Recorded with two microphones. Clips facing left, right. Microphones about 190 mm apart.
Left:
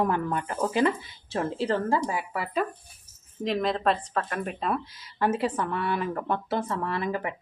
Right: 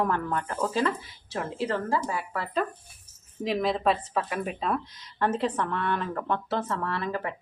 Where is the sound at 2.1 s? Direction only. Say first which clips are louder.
Left 1 dB; 15° left (ahead or behind).